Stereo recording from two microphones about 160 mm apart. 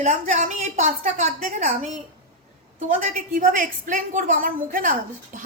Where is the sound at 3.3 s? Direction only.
60° right (ahead or behind).